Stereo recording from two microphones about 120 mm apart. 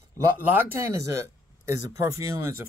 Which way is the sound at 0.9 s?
25° right (ahead or behind).